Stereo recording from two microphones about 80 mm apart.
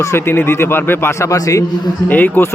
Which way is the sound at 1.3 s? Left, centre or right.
Left.